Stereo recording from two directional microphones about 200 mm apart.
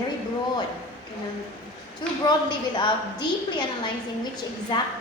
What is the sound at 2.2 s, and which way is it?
A woman's voice, 20° left (ahead or behind).